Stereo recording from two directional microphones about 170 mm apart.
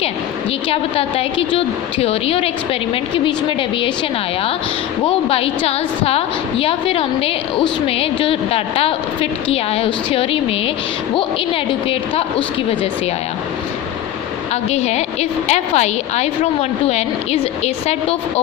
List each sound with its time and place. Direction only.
0.7 s a woman's voice: 35° left (ahead or behind)
5.0 s a woman's voice: 35° left (ahead or behind)
14.5 s a woman's voice: 40° left (ahead or behind)